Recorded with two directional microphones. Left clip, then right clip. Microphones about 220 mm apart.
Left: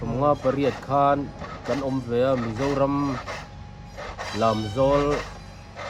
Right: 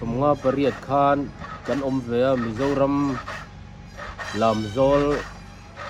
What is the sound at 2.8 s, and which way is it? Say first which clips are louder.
Speech: right 2 dB; centre (ahead or behind).